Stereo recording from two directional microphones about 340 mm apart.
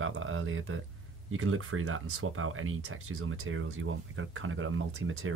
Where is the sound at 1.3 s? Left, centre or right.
Right.